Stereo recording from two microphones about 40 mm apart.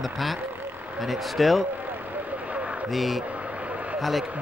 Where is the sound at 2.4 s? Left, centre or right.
Right.